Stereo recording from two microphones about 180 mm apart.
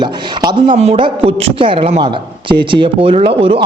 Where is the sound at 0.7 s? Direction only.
35° right (ahead or behind).